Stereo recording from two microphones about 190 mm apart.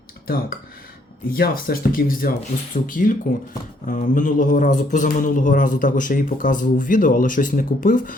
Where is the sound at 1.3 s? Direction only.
50° left (ahead or behind).